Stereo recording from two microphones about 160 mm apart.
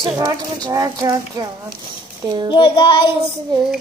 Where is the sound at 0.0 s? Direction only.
25° right (ahead or behind).